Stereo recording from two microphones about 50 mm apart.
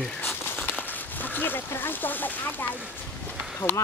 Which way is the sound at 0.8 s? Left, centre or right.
Left.